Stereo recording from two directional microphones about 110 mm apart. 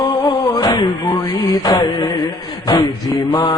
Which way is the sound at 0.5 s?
40° left (ahead or behind).